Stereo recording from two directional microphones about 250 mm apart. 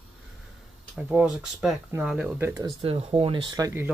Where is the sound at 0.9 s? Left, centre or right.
Centre.